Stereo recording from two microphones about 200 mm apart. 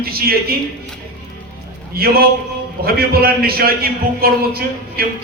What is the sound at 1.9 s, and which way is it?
A man's voice, 50° right (ahead or behind).